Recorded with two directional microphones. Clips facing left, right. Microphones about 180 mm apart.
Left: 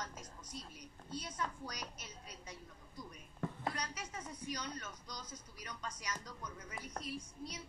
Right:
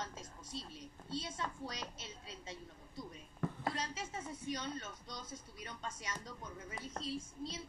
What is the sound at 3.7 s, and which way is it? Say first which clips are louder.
Speech: right 2 dB; 25° right (ahead or behind).